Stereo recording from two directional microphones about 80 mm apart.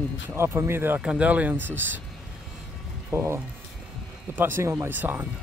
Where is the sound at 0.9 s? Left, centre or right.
Centre.